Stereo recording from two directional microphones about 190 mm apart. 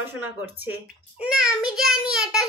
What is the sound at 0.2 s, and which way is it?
A child's voice, 10° right (ahead or behind).